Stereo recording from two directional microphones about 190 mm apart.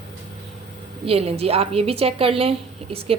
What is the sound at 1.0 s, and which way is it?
Speech, 30° right (ahead or behind).